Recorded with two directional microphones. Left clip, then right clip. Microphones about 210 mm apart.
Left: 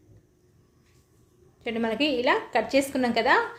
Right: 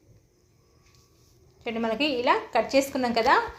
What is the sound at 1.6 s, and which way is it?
A woman's voice, 10° left (ahead or behind).